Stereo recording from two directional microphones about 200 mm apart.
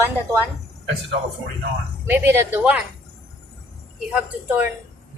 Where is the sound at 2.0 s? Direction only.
10° right (ahead or behind).